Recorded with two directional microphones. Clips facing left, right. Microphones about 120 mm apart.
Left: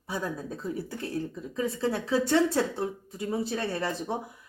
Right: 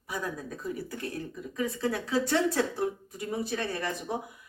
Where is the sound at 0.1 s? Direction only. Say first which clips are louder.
Left 2 dB; 30° left (ahead or behind).